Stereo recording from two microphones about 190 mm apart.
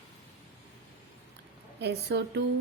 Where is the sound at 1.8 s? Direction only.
60° right (ahead or behind).